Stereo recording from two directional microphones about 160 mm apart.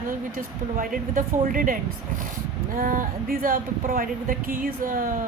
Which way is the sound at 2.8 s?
55° right (ahead or behind).